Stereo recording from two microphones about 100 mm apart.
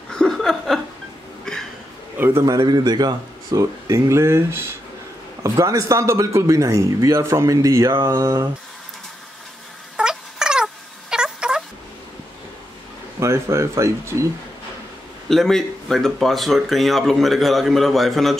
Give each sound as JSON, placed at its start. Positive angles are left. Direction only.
{"t": 0.1, "sound": "a sound", "side_deg": 5}
{"t": 2.1, "sound": "a man's voice", "side_deg": -20}
{"t": 2.4, "sound": "a man's voice", "side_deg": -40}
{"t": 5.4, "sound": "a man's voice", "side_deg": -35}
{"t": 9.9, "sound": "cat", "side_deg": -10}
{"t": 13.2, "sound": "speech", "side_deg": -30}
{"t": 15.2, "sound": "speech", "side_deg": 5}